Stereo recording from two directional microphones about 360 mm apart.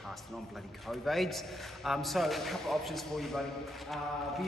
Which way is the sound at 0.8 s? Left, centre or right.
Centre.